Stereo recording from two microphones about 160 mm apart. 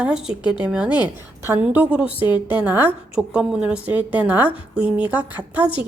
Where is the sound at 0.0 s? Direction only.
5° right (ahead or behind).